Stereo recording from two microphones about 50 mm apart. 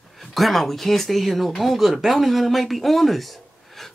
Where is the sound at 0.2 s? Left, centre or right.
Centre.